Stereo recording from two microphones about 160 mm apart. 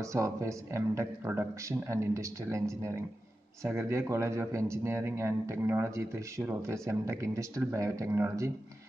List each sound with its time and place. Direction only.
0.0 s a man's voice: 20° right (ahead or behind)